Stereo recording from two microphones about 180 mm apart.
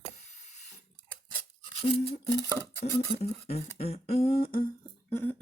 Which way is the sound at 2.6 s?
15° left (ahead or behind).